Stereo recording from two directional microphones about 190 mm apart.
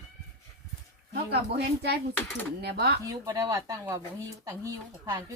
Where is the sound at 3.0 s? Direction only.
20° right (ahead or behind).